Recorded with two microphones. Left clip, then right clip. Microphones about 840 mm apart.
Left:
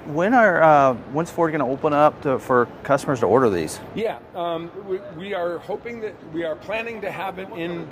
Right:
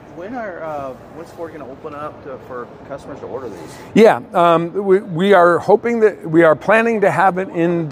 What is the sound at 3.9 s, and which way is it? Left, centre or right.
Speech, right.